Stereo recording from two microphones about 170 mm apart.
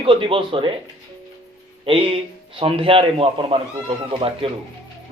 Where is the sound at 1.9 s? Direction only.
30° right (ahead or behind).